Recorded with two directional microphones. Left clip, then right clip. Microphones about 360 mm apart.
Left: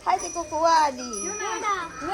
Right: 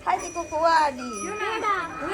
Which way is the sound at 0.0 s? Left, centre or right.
Left.